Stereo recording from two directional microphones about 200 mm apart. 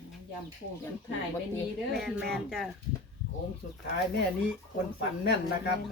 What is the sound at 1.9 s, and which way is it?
Speech, centre (ahead or behind).